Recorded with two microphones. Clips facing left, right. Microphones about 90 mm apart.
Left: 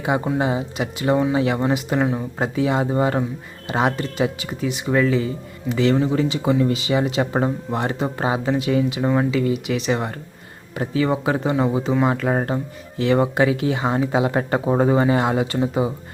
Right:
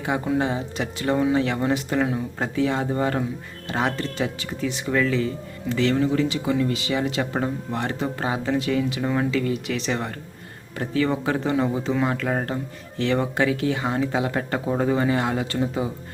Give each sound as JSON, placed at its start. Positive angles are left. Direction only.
{"t": 0.0, "sound": "speech", "side_deg": 15}